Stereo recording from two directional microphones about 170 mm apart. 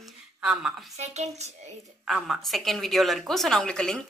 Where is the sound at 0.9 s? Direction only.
40° right (ahead or behind).